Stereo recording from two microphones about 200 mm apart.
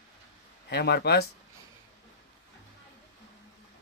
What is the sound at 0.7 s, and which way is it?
Speech, 55° left (ahead or behind).